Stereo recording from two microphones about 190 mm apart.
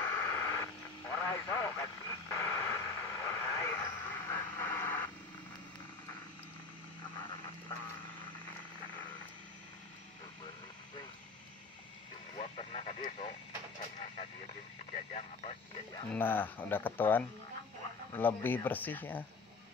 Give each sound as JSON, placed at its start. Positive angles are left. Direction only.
{"t": 0.0, "sound": "radio", "side_deg": 15}
{"t": 12.4, "sound": "vehicle", "side_deg": 35}
{"t": 14.9, "sound": "radio", "side_deg": 35}
{"t": 16.1, "sound": "a sound", "side_deg": 10}
{"t": 18.2, "sound": "speech", "side_deg": 10}